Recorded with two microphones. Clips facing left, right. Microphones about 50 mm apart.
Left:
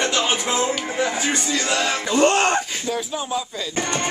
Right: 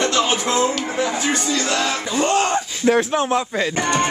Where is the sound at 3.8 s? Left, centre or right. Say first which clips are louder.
Right 3 dB; right.